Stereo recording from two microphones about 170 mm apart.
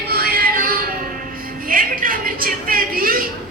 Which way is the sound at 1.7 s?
55° right (ahead or behind).